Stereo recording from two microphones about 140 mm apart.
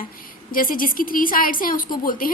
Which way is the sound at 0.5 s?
90° left.